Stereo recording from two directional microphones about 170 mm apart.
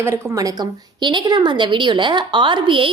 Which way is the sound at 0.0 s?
20° right (ahead or behind).